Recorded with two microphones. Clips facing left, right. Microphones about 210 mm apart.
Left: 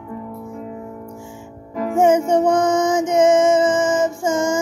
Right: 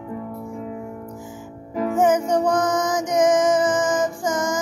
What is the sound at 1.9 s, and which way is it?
Music, 25° left (ahead or behind).